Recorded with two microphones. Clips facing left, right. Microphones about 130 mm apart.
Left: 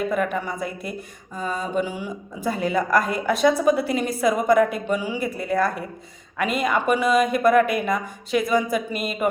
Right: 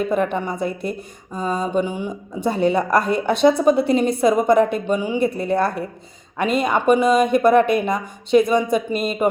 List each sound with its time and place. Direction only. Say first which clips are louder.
0.3 s speech: right 4 dB; 25° right (ahead or behind)